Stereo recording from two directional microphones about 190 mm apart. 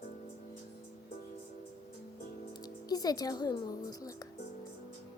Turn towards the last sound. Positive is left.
turn(degrees=20)  # may be behind; listen again after turning